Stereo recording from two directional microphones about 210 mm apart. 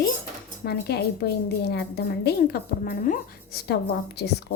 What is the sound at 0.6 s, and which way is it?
A woman's voice, 50° left (ahead or behind).